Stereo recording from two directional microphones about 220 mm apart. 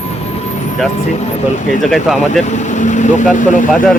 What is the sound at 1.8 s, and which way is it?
Speech, centre (ahead or behind).